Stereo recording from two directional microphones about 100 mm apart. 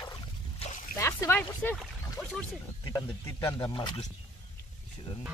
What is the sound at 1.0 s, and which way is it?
Speech, 25° left (ahead or behind).